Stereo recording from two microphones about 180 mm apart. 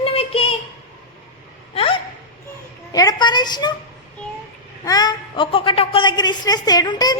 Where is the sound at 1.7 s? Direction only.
30° left (ahead or behind).